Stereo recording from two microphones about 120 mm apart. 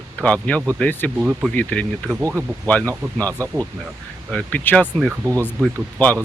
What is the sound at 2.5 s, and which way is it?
Speech, 20° right (ahead or behind).